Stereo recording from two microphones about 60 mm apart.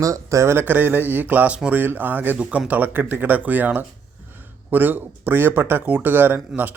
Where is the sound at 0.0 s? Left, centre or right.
Right.